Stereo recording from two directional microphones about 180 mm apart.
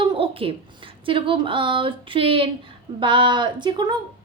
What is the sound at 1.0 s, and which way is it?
A woman's voice, 30° right (ahead or behind).